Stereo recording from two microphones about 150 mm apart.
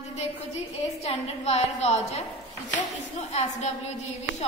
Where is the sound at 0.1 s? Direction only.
50° left (ahead or behind).